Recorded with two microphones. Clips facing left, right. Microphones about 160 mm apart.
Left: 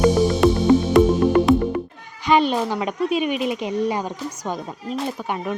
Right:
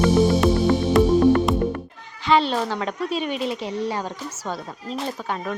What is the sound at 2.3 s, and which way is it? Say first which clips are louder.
Speech: left 2 dB; 15° left (ahead or behind).